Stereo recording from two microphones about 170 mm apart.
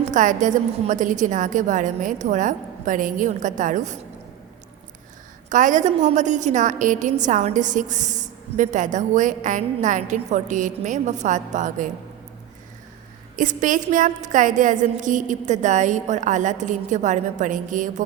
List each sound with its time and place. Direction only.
0.1 s a woman's voice: 50° right (ahead or behind)
5.5 s a woman's voice: 50° right (ahead or behind)
13.3 s a woman's voice: 50° right (ahead or behind)